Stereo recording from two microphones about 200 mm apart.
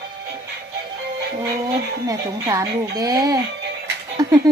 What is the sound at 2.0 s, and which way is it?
A child's voice, 15° right (ahead or behind).